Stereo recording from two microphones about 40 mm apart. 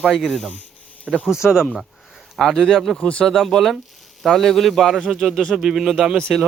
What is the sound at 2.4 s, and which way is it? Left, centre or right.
Speech, centre.